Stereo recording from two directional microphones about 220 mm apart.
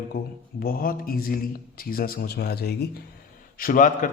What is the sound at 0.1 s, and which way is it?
A man's voice, 45° left (ahead or behind).